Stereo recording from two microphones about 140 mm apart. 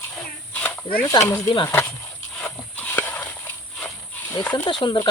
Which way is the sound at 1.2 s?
20° left (ahead or behind).